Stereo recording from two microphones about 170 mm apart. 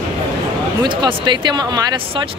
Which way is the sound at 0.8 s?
25° right (ahead or behind).